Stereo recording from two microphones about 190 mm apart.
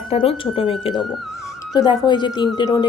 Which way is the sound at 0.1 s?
30° left (ahead or behind).